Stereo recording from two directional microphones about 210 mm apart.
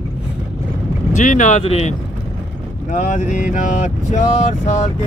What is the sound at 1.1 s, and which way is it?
Speech, 35° left (ahead or behind).